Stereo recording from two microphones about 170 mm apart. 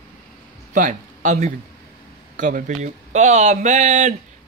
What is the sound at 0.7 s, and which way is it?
Speech, 50° right (ahead or behind).